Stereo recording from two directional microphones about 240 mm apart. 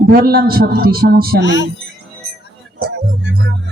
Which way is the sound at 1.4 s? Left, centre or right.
Left.